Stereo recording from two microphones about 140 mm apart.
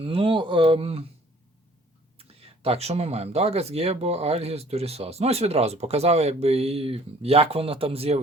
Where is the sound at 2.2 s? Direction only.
45° right (ahead or behind).